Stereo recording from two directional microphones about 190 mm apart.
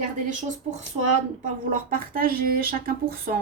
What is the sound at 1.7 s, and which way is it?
A woman's voice, 50° right (ahead or behind).